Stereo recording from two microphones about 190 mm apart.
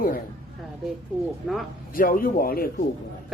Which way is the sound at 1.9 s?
50° left (ahead or behind).